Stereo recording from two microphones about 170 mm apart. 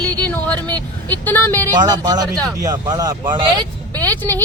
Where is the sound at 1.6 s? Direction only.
25° right (ahead or behind).